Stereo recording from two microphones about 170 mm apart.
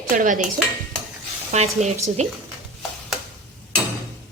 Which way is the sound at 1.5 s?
40° right (ahead or behind).